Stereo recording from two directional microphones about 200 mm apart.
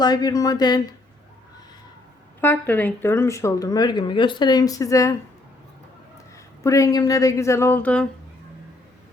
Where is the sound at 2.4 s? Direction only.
10° left (ahead or behind).